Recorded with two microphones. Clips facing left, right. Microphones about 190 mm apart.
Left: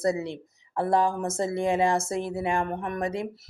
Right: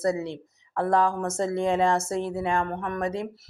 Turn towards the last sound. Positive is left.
turn(degrees=10)  # may be behind; listen again after turning